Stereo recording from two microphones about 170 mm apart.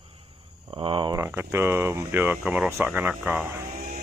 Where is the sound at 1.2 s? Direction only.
15° right (ahead or behind).